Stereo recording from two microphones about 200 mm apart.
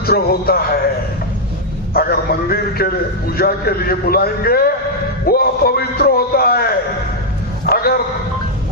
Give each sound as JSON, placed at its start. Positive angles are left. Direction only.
{"t": 0.0, "sound": "a man's voice", "side_deg": 50}
{"t": 1.9, "sound": "a man's voice", "side_deg": 50}
{"t": 7.7, "sound": "a sound", "side_deg": 50}